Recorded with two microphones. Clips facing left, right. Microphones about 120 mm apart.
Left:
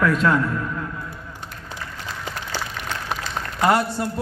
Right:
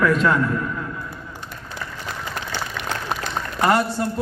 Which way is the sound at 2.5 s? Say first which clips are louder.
Right 2 dB; 60° right (ahead or behind).